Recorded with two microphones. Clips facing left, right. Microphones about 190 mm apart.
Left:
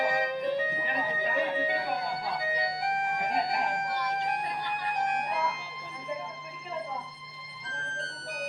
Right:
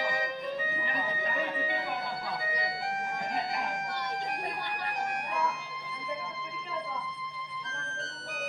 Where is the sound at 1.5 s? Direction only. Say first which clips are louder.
Left 4 dB; 30° left (ahead or behind).